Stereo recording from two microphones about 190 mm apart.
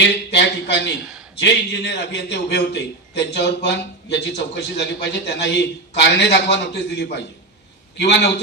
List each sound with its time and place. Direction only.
0.0 s a man's voice: 65° left (ahead or behind)